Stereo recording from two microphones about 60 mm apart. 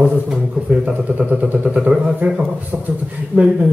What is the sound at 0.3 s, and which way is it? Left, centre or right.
Speech, right.